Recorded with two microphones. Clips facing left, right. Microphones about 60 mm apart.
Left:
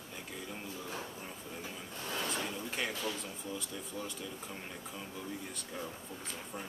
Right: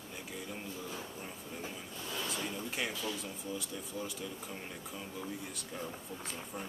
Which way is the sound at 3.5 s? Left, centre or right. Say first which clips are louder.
Right 1 dB; centre.